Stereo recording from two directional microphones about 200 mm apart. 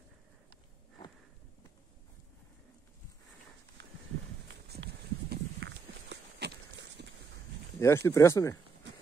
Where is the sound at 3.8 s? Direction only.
60° right (ahead or behind).